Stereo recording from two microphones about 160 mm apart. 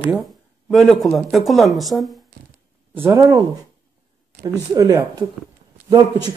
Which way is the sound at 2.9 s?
15° right (ahead or behind).